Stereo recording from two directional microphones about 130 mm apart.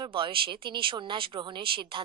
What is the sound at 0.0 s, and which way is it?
A woman's voice, 40° right (ahead or behind).